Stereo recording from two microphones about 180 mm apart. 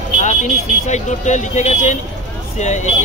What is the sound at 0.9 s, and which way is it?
Speech, 40° left (ahead or behind).